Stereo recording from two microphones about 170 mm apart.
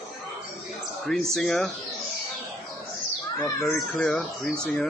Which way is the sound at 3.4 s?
15° left (ahead or behind).